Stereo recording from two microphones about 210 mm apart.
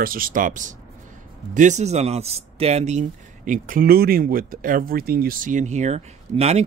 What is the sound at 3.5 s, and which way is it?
Speech, 40° right (ahead or behind).